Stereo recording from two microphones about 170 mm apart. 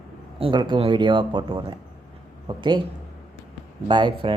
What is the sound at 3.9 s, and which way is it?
Speech, 30° right (ahead or behind).